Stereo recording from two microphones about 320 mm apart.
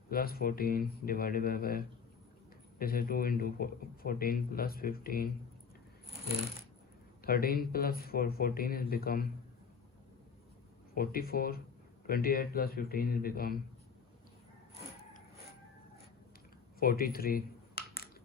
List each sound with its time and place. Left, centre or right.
0.1 s speech: left
7.2 s speech: left
10.9 s speech: left
16.8 s a sound: left